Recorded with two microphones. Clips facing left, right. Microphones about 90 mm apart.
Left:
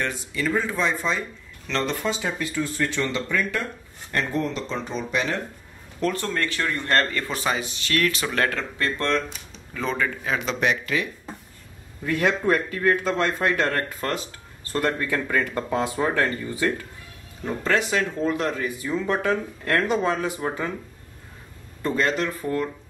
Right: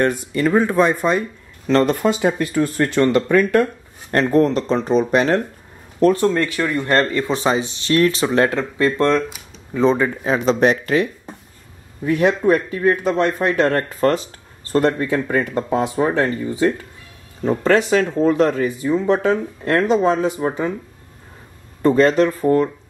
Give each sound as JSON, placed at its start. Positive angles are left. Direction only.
{"t": 0.0, "sound": "speech", "side_deg": -50}
{"t": 6.2, "sound": "speech", "side_deg": -20}
{"t": 12.0, "sound": "speech", "side_deg": -20}
{"t": 17.6, "sound": "speech", "side_deg": -35}
{"t": 18.9, "sound": "speech", "side_deg": -20}
{"t": 21.8, "sound": "speech", "side_deg": -35}